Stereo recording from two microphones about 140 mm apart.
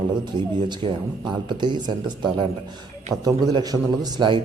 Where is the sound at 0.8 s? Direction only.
40° right (ahead or behind).